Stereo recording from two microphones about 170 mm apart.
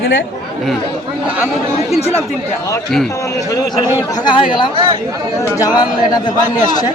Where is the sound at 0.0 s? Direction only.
90° left.